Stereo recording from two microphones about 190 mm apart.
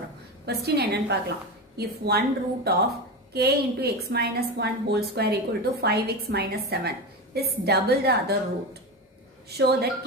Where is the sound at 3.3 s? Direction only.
55° right (ahead or behind).